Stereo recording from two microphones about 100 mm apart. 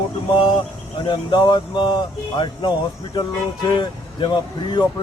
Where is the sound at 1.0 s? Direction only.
50° left (ahead or behind).